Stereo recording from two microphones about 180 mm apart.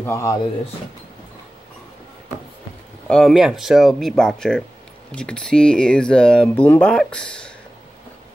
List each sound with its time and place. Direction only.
0.0 s speech: 15° left (ahead or behind)
3.1 s speech: centre (ahead or behind)